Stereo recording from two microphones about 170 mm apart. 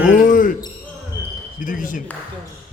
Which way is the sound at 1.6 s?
50° left (ahead or behind).